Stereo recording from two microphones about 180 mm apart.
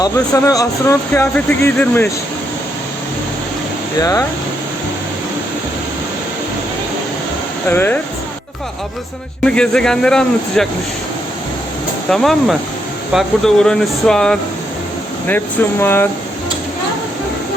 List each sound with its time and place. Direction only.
0.0 s speech: 20° left (ahead or behind)
4.0 s speech: 20° left (ahead or behind)
7.7 s speech: 10° left (ahead or behind)
9.4 s a man's voice: 5° left (ahead or behind)
12.1 s a man's voice: centre (ahead or behind)
15.8 s speech: 10° left (ahead or behind)